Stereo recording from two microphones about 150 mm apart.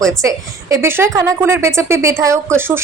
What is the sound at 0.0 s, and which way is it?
A woman's voice, 20° right (ahead or behind).